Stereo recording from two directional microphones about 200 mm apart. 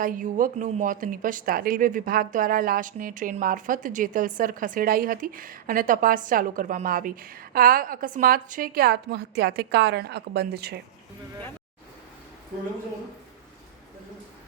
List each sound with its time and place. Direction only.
0.0 s speech: 40° right (ahead or behind)